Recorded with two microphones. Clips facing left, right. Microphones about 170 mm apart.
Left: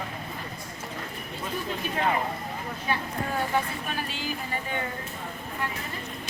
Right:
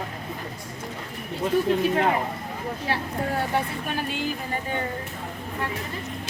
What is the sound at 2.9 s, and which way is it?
Speech, 90° right.